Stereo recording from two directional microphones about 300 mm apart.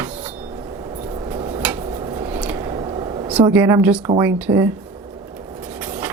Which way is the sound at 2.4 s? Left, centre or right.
Centre.